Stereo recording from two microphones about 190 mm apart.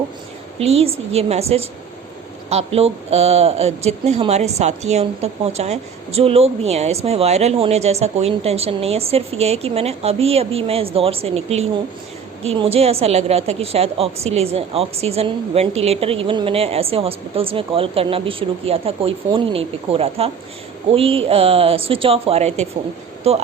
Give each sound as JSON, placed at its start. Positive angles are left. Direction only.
{"t": 0.6, "sound": "a woman's voice", "side_deg": -30}